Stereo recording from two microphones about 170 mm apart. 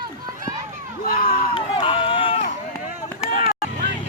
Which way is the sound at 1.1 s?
55° left (ahead or behind).